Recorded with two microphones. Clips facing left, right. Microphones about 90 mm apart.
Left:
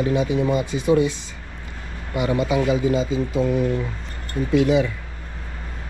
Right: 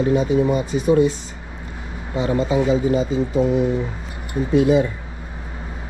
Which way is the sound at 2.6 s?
20° right (ahead or behind).